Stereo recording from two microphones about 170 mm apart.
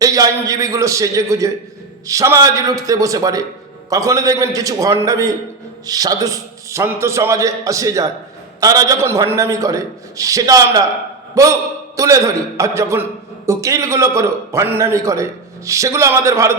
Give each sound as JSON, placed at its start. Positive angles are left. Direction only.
{"t": 0.0, "sound": "a man's voice", "side_deg": -20}